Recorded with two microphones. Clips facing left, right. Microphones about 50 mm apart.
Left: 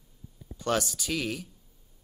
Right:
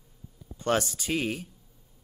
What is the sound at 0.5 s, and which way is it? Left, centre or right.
Speech, right.